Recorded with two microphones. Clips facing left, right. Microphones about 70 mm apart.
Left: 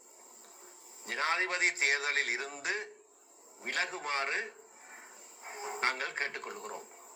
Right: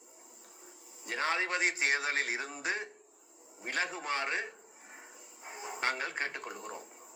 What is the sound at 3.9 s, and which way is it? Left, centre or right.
Speech, left.